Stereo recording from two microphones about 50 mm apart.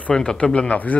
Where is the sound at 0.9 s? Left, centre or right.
Left.